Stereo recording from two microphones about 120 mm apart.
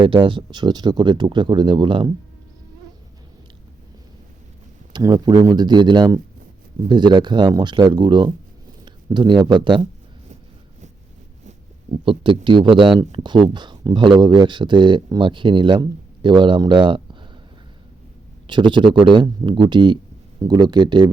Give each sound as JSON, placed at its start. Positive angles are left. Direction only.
{"t": 0.0, "sound": "speech", "side_deg": -45}
{"t": 4.9, "sound": "speech", "side_deg": -35}
{"t": 8.8, "sound": "a sound", "side_deg": -40}
{"t": 9.4, "sound": "speech", "side_deg": -40}
{"t": 11.9, "sound": "speech", "side_deg": -45}
{"t": 18.4, "sound": "speech", "side_deg": -40}